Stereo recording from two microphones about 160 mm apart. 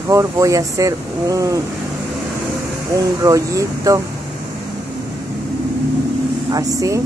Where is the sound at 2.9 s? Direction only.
20° right (ahead or behind).